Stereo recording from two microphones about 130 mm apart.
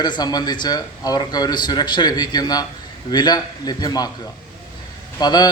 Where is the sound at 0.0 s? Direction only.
30° left (ahead or behind).